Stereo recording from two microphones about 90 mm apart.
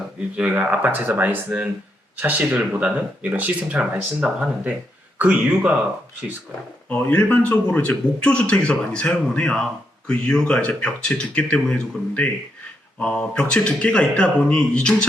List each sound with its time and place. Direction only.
0.3 s speech: 15° right (ahead or behind)
6.8 s speech: 20° left (ahead or behind)